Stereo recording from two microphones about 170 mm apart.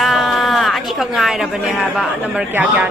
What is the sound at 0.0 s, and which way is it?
Speech, centre (ahead or behind).